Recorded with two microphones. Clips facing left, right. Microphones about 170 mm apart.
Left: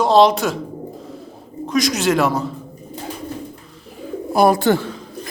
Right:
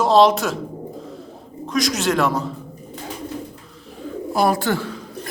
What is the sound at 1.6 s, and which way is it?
Speech, centre (ahead or behind).